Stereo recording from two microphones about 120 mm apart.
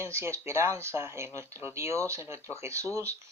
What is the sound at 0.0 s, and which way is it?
Speech, 25° right (ahead or behind).